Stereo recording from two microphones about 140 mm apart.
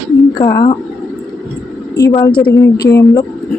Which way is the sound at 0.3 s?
25° left (ahead or behind).